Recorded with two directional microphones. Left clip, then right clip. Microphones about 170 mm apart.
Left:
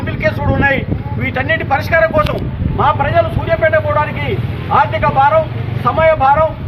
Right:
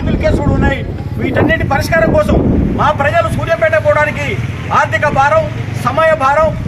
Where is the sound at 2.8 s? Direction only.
15° left (ahead or behind).